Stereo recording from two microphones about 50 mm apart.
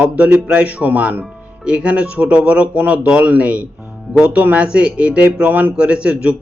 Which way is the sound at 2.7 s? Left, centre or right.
Right.